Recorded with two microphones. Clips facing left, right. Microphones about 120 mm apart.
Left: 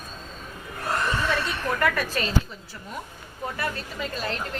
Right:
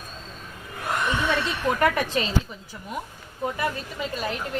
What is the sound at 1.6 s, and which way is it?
Speech, 20° right (ahead or behind).